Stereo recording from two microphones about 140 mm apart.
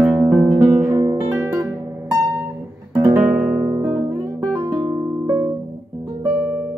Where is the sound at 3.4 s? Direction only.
5° right (ahead or behind).